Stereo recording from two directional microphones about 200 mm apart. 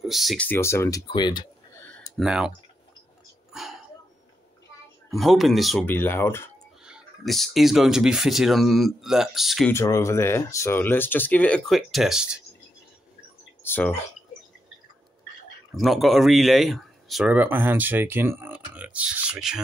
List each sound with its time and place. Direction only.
0.0 s speech: centre (ahead or behind)
0.5 s speech: 15° left (ahead or behind)
1.8 s a sound: 5° left (ahead or behind)
3.5 s a sound: centre (ahead or behind)
5.1 s speech: centre (ahead or behind)
6.8 s speech: centre (ahead or behind)
9.7 s speech: 15° left (ahead or behind); by 12.4 s 5° right (ahead or behind)
13.6 s speech: 10° left (ahead or behind)
15.7 s speech: centre (ahead or behind)